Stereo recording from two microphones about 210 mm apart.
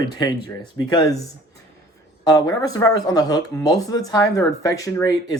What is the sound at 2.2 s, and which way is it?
Speech, 20° left (ahead or behind).